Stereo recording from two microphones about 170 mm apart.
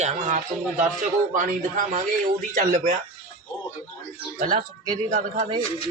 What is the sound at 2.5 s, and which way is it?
Speech, 50° right (ahead or behind).